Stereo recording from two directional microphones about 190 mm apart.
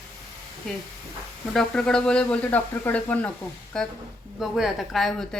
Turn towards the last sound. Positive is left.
turn(degrees=0)  # may be behind; listen again after turning